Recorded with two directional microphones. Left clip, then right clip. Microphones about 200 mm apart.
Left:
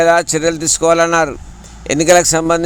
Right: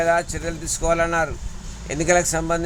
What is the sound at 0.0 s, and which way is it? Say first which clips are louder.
A man's voice: left 9 dB; 45° left (ahead or behind).